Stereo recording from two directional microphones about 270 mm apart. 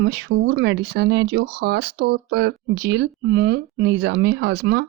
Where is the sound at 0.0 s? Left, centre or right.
Right.